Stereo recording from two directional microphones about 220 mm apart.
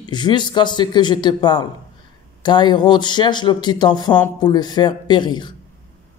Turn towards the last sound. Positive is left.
turn(degrees=20)  # may be behind; listen again after turning